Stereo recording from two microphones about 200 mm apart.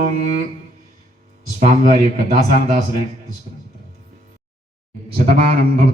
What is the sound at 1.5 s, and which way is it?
Speech, 40° right (ahead or behind).